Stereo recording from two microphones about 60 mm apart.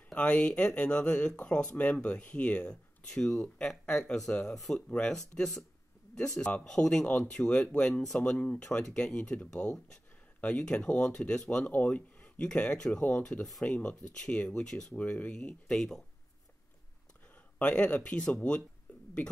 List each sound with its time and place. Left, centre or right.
0.1 s speech: centre
8.2 s speech: left
15.0 s speech: left
17.6 s speech: left